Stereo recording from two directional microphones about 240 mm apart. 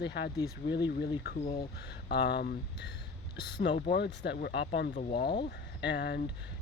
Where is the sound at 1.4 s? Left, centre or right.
Left.